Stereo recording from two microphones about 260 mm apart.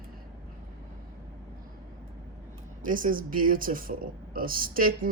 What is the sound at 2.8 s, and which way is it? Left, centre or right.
Speech, right.